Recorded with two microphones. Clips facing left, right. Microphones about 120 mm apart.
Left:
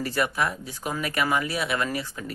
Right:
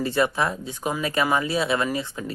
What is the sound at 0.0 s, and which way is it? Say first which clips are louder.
Speech: right 3 dB; 25° right (ahead or behind).